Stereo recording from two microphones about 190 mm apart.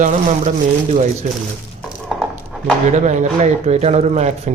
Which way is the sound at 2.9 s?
40° right (ahead or behind).